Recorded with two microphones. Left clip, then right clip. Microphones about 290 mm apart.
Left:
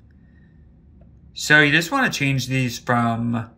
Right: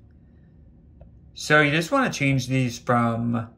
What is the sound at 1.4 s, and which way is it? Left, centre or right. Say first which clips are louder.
Speech: left 4 dB; left.